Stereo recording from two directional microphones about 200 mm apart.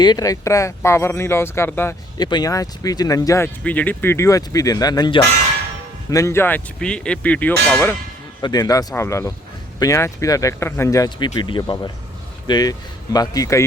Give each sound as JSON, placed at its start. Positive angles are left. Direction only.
{"t": 0.0, "sound": "speech", "side_deg": 20}
{"t": 8.4, "sound": "speech", "side_deg": 20}